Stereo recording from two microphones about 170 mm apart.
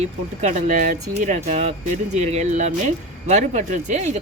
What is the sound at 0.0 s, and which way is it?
Speech, 45° right (ahead or behind).